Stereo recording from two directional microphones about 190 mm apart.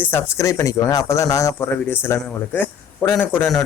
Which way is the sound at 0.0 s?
10° left (ahead or behind).